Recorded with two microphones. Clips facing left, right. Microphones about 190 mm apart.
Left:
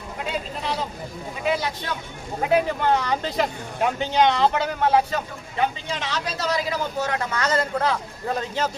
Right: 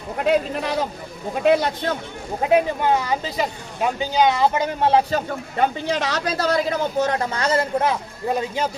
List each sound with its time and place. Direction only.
0.2 s a man's voice: 65° right (ahead or behind)
2.8 s speech: 10° right (ahead or behind)
4.8 s a man's voice: 30° right (ahead or behind)
5.9 s speech: 70° right (ahead or behind)
7.0 s a man's voice: 35° right (ahead or behind); by 8.7 s 10° right (ahead or behind)